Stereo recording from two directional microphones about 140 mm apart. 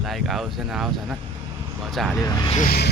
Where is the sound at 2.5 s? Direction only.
70° left (ahead or behind).